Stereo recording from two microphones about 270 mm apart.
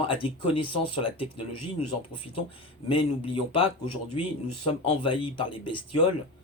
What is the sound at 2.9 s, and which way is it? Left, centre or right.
Speech, centre.